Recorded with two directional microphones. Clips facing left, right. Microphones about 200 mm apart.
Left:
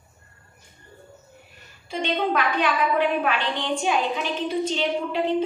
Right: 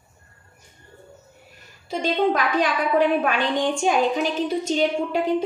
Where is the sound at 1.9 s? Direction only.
40° right (ahead or behind).